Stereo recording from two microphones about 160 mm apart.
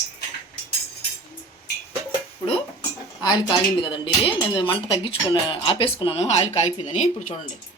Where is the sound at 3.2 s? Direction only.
25° left (ahead or behind); by 7.1 s 45° left (ahead or behind).